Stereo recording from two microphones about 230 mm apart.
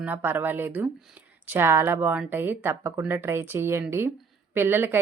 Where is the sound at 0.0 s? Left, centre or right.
Centre.